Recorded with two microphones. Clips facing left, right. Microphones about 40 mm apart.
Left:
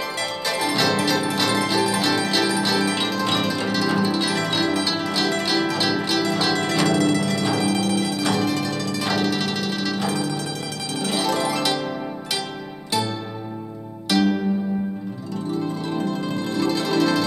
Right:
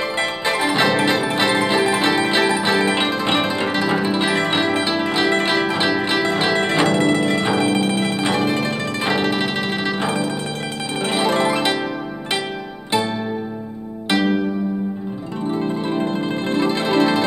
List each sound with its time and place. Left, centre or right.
0.2 s music: right
11.0 s zither: right
14.0 s music: right
15.5 s zither: right